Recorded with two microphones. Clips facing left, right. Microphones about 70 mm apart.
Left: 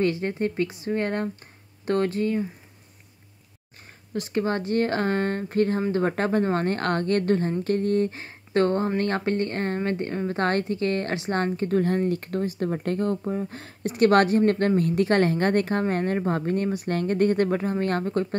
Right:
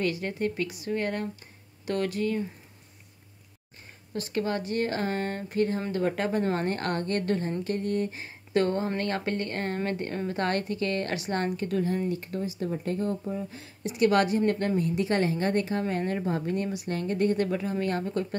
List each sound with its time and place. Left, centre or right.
0.0 s speech: left
4.1 s speech: left
11.8 s speech: left